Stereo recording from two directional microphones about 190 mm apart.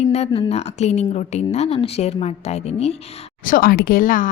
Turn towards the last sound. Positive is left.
turn(degrees=45)  # may be behind; listen again after turning